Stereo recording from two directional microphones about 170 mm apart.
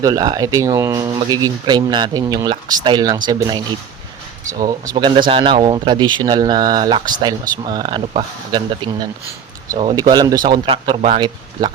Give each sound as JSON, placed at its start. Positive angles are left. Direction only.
{"t": 0.0, "sound": "speech", "side_deg": -20}
{"t": 4.6, "sound": "speech", "side_deg": -25}